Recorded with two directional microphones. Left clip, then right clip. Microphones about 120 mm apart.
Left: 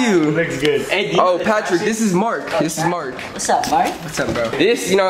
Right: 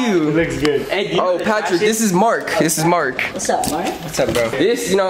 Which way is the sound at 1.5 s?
5° right (ahead or behind).